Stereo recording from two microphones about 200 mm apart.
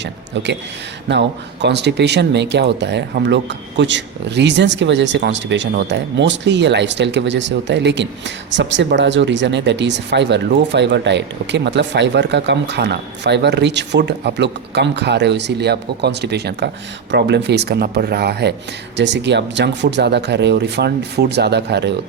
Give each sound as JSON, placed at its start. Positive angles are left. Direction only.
{"t": 1.6, "sound": "speech", "side_deg": -60}